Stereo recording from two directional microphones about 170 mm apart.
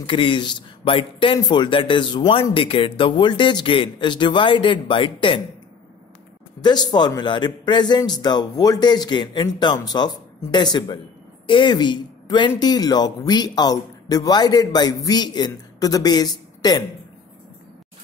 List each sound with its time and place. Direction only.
0.0 s speech: 30° left (ahead or behind)
6.6 s speech: 25° left (ahead or behind)